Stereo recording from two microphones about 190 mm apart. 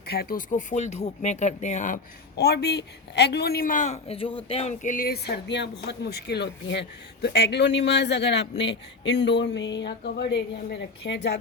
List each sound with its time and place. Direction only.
0.1 s speech: 50° left (ahead or behind)
2.3 s a man's voice: 60° left (ahead or behind)